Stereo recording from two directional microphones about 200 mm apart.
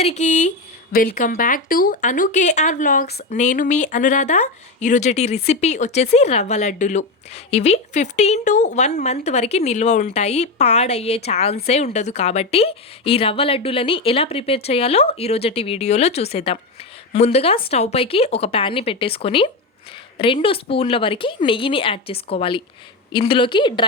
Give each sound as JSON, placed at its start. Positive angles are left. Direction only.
{"t": 0.0, "sound": "a woman's voice", "side_deg": 35}